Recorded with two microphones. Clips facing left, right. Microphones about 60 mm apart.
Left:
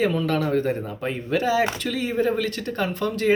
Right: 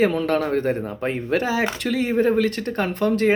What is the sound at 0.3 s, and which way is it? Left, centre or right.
Speech, right.